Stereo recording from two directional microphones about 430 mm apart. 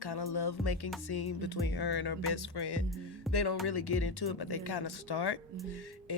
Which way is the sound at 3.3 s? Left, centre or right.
Left.